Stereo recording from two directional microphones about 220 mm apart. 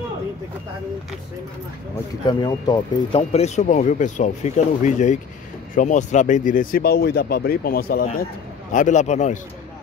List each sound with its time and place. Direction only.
2.2 s speech: 20° left (ahead or behind)
3.2 s speech: 30° left (ahead or behind)